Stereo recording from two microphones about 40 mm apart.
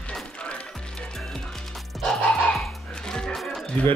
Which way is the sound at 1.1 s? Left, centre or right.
Centre.